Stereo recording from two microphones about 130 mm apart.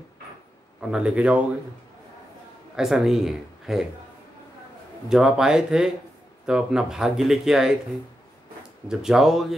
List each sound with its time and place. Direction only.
0.7 s a man's voice: 5° right (ahead or behind)
2.7 s speech: centre (ahead or behind)
5.1 s speech: 5° right (ahead or behind)
8.8 s speech: 5° right (ahead or behind)